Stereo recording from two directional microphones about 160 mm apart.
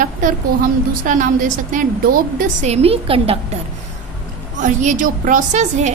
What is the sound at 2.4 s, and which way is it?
Speech, 45° right (ahead or behind).